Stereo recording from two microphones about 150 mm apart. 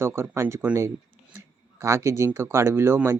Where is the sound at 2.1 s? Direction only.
20° right (ahead or behind).